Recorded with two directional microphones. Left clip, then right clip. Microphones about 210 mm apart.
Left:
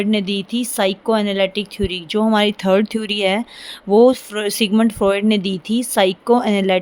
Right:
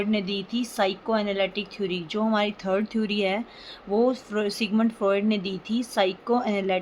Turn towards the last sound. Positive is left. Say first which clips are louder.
# left 9 dB
turn(degrees=50)  # may be behind; listen again after turning